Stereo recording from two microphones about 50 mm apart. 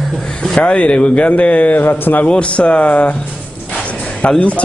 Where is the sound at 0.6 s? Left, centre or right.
Left.